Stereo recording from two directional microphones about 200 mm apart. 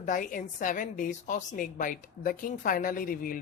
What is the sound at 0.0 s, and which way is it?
A woman's voice, 40° left (ahead or behind).